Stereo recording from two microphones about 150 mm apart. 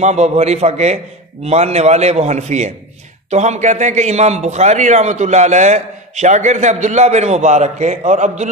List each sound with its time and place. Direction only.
0.0 s a man's voice: 50° right (ahead or behind)